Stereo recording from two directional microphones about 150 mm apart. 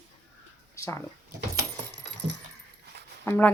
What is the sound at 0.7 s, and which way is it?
Speech, 20° left (ahead or behind).